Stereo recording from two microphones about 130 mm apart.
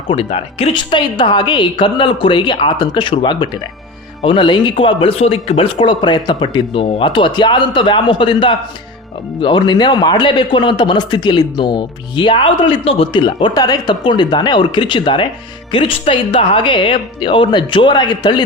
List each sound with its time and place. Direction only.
0.1 s a man's voice: 45° left (ahead or behind)